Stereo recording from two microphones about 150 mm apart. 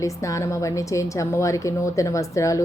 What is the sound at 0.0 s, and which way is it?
A woman's voice, 20° left (ahead or behind).